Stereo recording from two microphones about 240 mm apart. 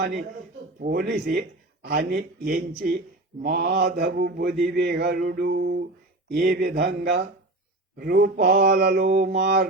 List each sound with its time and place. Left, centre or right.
0.8 s mantra: right
6.3 s speech: right
7.9 s mantra: right